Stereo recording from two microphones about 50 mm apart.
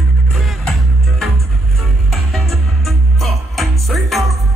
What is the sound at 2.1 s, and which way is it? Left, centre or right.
Music, centre.